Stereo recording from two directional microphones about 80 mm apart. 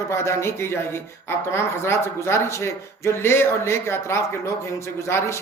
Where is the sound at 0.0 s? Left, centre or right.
Left.